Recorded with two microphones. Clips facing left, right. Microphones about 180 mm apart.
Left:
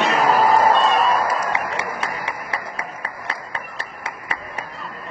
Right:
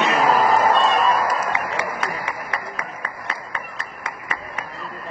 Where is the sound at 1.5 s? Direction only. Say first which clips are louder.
Even; 30° left (ahead or behind).